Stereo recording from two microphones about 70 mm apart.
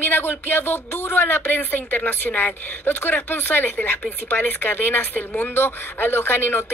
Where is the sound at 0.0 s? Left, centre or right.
Left.